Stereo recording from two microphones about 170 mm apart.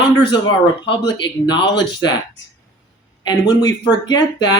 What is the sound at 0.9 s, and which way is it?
Speech, 30° left (ahead or behind).